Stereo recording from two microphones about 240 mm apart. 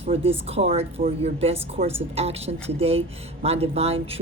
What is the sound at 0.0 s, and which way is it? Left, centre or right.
Speech, right.